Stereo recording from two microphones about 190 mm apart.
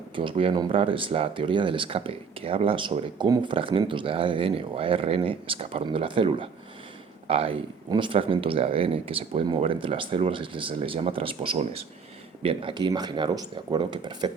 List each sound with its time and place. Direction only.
0.2 s speech: 25° right (ahead or behind)